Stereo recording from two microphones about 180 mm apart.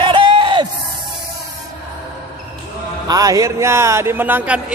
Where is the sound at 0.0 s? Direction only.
30° right (ahead or behind).